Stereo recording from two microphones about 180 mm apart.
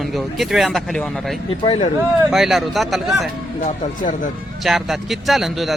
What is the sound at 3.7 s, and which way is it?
Speech, 45° left (ahead or behind).